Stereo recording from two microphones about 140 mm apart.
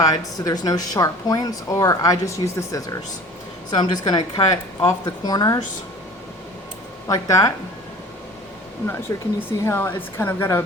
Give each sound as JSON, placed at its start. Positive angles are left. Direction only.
{"t": 0.0, "sound": "speech", "side_deg": 25}
{"t": 7.1, "sound": "speech", "side_deg": 25}
{"t": 9.1, "sound": "a woman's voice", "side_deg": 20}